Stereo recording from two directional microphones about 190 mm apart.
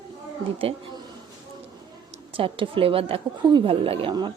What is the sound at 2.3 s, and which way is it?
A child's voice, 30° right (ahead or behind).